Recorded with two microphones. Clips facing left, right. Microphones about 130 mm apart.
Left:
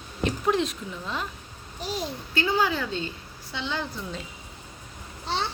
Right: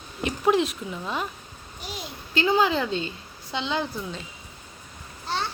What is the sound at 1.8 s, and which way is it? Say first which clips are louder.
Speech: left 6 dB; 35° left (ahead or behind).